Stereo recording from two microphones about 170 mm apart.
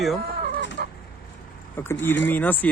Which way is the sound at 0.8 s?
70° right (ahead or behind).